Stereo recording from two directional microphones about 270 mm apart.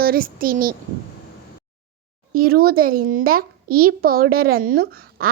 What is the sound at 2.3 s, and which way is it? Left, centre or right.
A child's voice, right.